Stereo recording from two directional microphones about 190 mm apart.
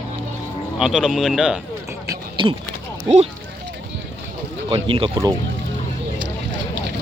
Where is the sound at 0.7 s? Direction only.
5° right (ahead or behind).